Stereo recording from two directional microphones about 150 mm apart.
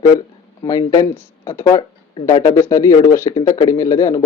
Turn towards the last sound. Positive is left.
turn(degrees=20)  # may be behind; listen again after turning